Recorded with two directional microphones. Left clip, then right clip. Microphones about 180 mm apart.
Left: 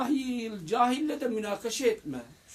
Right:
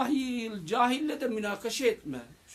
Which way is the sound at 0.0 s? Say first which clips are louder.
Even; 10° right (ahead or behind).